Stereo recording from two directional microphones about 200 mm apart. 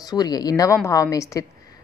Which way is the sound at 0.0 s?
20° left (ahead or behind).